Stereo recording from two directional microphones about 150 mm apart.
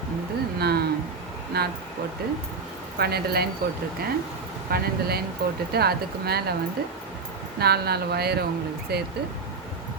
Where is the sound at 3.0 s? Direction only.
90° right.